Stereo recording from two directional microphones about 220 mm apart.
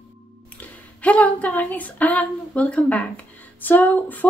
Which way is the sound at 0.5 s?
5° left (ahead or behind).